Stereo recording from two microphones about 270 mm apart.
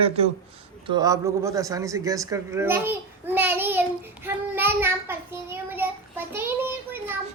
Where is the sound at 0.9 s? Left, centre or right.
Centre.